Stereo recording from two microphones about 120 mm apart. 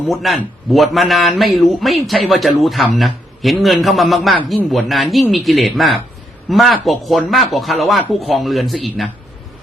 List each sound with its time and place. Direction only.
0.1 s a man's voice: centre (ahead or behind)